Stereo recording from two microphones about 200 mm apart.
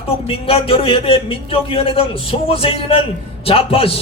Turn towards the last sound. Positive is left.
turn(degrees=30)  # may be behind; listen again after turning